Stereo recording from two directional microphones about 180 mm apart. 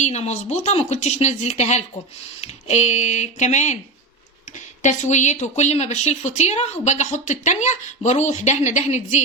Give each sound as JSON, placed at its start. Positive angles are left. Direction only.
{"t": 0.0, "sound": "speech", "side_deg": 40}
{"t": 4.8, "sound": "speech", "side_deg": 40}